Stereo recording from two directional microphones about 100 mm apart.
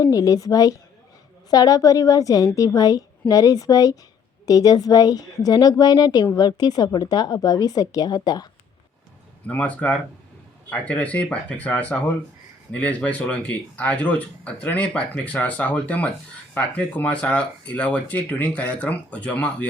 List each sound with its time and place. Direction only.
0.0 s speech: 35° left (ahead or behind)
9.5 s speech: 15° left (ahead or behind)